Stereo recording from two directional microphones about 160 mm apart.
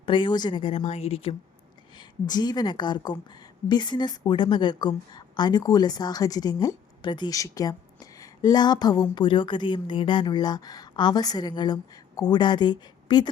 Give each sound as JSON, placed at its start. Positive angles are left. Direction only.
{"t": 0.0, "sound": "speech", "side_deg": 30}
{"t": 2.3, "sound": "speech", "side_deg": 25}